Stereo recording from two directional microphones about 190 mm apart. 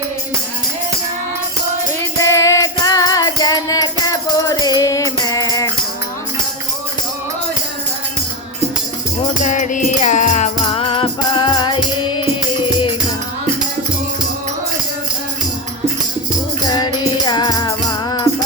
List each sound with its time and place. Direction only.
2.2 s music: 15° left (ahead or behind)
9.4 s music: 40° left (ahead or behind); by 11.8 s 25° left (ahead or behind)
16.7 s music: 20° left (ahead or behind)